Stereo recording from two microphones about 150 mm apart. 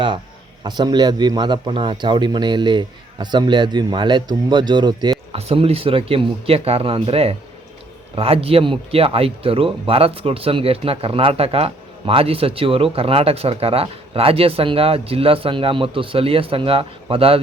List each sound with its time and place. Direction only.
0.6 s a man's voice: 30° right (ahead or behind)
5.3 s speech: 40° right (ahead or behind)